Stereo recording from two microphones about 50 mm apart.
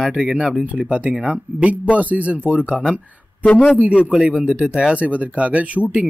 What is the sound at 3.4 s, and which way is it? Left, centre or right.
Speech, left.